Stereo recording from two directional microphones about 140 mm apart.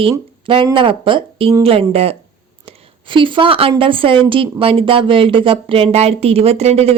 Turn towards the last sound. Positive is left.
turn(degrees=-45)  # may be behind; listen again after turning